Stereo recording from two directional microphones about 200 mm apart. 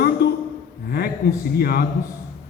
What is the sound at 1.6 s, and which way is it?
Speech, 50° left (ahead or behind).